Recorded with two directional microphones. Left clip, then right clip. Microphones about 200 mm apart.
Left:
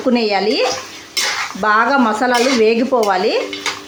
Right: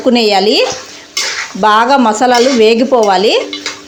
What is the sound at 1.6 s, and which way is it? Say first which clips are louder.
A woman's voice: right 5 dB; 30° right (ahead or behind).